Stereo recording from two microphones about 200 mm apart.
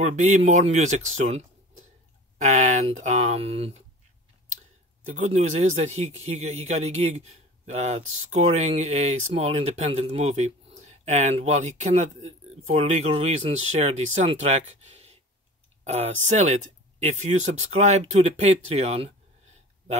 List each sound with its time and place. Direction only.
0.0 s speech: 35° right (ahead or behind)
5.0 s speech: 35° right (ahead or behind)
16.3 s speech: 35° right (ahead or behind)